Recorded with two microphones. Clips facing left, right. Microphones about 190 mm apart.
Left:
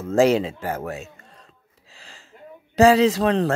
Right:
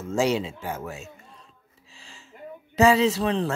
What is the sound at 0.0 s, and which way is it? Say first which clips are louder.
Speech: left 6 dB; 60° left (ahead or behind).